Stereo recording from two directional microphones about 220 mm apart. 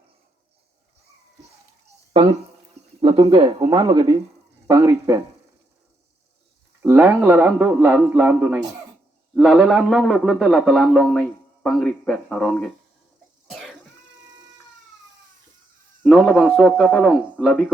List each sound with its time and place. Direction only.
2.1 s a man's voice: 25° right (ahead or behind)
6.8 s a man's voice: 10° right (ahead or behind)
13.5 s cough: centre (ahead or behind)
16.0 s a man's voice: 5° left (ahead or behind)